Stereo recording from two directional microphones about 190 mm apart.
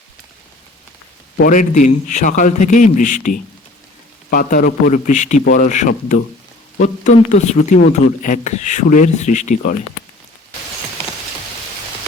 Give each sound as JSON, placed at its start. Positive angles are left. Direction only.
{"t": 1.4, "sound": "speech", "side_deg": 45}